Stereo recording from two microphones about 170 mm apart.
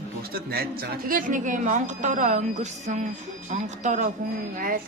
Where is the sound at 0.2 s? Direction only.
65° right (ahead or behind).